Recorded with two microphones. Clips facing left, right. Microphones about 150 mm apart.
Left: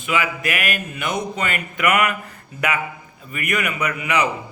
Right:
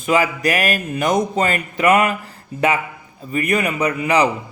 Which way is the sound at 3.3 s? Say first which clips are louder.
Right 5 dB; 30° right (ahead or behind).